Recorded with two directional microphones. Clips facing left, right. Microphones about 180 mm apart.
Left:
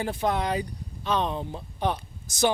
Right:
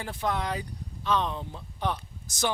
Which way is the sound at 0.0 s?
20° left (ahead or behind).